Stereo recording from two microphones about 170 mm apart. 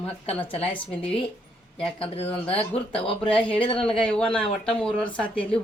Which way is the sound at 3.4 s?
30° left (ahead or behind).